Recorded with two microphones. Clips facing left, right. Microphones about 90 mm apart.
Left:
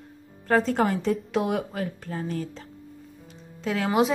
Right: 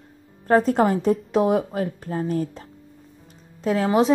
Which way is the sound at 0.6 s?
40° right (ahead or behind).